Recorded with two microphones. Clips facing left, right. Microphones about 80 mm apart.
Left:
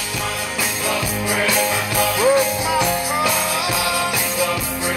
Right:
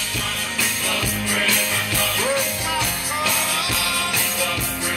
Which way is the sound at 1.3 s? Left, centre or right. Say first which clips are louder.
Left 5 dB; centre.